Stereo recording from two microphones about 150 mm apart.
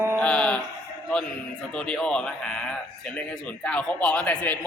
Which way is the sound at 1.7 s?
5° left (ahead or behind).